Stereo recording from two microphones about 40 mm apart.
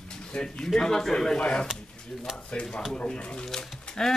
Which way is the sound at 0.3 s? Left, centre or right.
Left.